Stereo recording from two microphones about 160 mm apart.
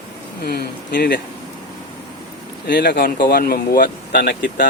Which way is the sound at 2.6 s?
90° left.